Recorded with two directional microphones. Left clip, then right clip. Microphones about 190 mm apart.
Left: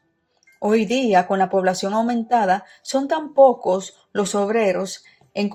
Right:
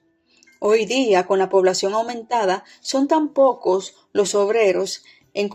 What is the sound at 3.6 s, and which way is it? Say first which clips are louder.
Speech: right 1 dB; 35° right (ahead or behind).